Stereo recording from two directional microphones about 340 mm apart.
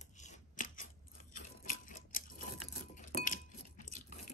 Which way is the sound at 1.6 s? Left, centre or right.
Left.